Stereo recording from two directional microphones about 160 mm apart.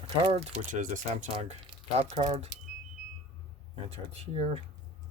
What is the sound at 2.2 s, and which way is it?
Speech, 25° right (ahead or behind).